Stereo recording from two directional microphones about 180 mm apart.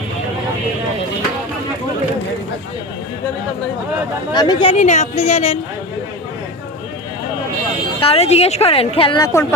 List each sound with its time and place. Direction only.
4.3 s speech: 25° left (ahead or behind)
8.0 s speech: 35° left (ahead or behind)
9.2 s speech: 15° left (ahead or behind)